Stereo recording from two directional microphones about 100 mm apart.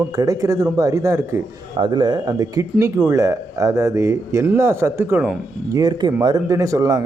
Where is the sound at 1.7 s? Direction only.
50° right (ahead or behind).